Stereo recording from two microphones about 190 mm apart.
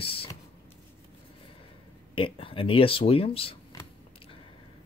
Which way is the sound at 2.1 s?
30° left (ahead or behind).